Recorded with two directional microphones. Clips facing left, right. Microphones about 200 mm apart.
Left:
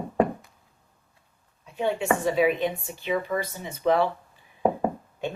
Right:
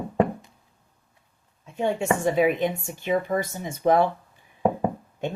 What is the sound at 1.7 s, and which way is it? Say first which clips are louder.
Speech: right 1 dB; 45° right (ahead or behind).